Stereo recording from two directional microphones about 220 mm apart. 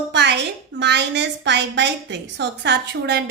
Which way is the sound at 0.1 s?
50° right (ahead or behind).